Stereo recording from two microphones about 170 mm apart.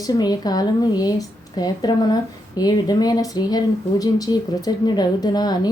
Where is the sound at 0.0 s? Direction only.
20° left (ahead or behind).